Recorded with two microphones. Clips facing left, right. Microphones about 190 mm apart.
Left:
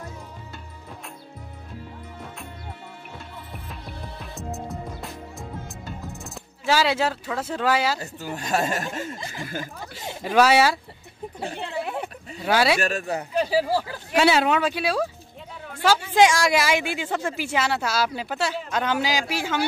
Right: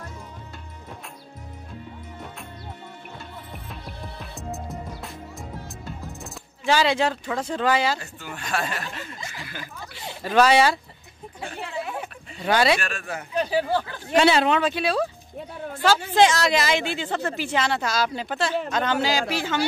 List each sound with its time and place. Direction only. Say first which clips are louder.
3.6 s music: even; centre (ahead or behind)
5.9 s speech: even; centre (ahead or behind)
8.0 s speech: left 5 dB; 40° left (ahead or behind)
9.1 s speech: left 3 dB; 35° left (ahead or behind)
9.4 s speech: left 5 dB; 45° left (ahead or behind)
10.0 s speech: even; 10° left (ahead or behind)
12.4 s speech: even; 5° left (ahead or behind)
12.8 s speech: left 6 dB; 40° left (ahead or behind)
13.3 s speech: even; 5° left (ahead or behind)